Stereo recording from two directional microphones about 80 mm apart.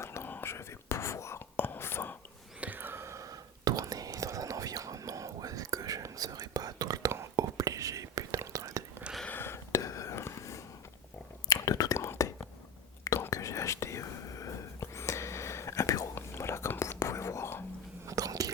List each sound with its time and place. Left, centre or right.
0.0 s whispering: left
2.6 s whispering: right
9.2 s a sound: left
9.7 s whispering: left
13.3 s whispering: left
18.0 s chewing: right